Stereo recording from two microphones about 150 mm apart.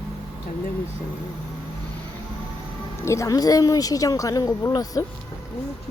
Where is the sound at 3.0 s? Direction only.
20° left (ahead or behind).